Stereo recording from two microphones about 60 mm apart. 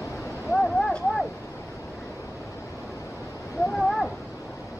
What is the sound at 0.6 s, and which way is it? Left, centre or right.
Vehicle, centre.